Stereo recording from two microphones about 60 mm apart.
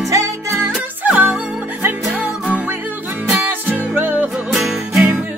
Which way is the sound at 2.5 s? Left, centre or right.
Right.